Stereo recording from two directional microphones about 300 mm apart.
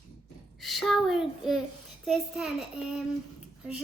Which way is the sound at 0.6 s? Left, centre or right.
Centre.